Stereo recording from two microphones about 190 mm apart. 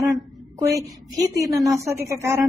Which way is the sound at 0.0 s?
15° right (ahead or behind).